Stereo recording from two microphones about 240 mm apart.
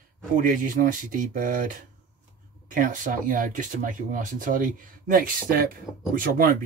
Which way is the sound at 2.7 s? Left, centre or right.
Right.